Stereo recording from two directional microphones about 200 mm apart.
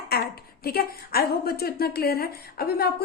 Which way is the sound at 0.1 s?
50° left (ahead or behind).